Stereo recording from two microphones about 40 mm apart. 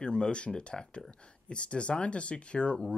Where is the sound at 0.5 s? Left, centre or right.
Centre.